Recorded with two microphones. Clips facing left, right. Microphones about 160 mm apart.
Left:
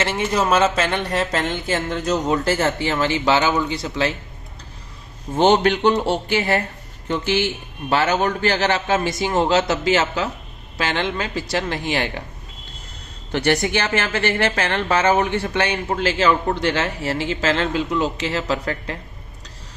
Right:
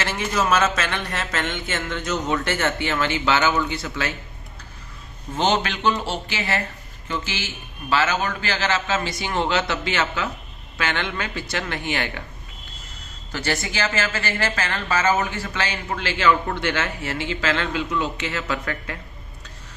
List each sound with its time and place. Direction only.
0.0 s speech: 25° left (ahead or behind)
5.4 s a woman's voice: 55° left (ahead or behind); by 12.2 s 35° left (ahead or behind)
13.3 s a woman's voice: 65° left (ahead or behind)
15.9 s speech: 40° left (ahead or behind)